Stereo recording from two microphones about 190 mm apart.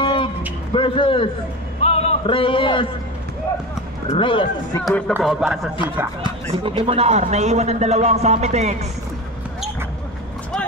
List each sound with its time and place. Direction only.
0.0 s a sound: 25° left (ahead or behind)
0.7 s speech: 25° left (ahead or behind)
1.8 s a sound: 30° left (ahead or behind)
4.1 s speech: 25° left (ahead or behind)
4.8 s a man's voice: 5° left (ahead or behind)
6.6 s speech: 30° right (ahead or behind)